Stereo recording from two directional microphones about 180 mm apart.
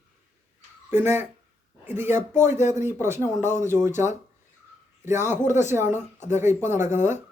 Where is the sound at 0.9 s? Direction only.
15° right (ahead or behind).